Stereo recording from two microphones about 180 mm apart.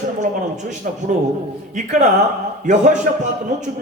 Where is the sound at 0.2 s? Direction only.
40° right (ahead or behind).